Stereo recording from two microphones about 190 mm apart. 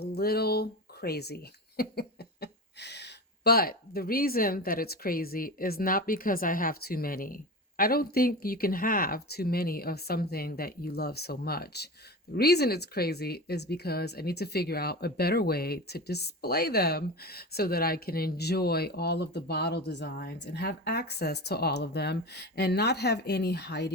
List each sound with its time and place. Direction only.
0.0 s speech: 55° left (ahead or behind)